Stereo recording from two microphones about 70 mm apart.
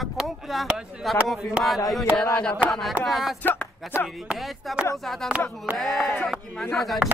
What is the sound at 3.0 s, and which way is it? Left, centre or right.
Speech, centre.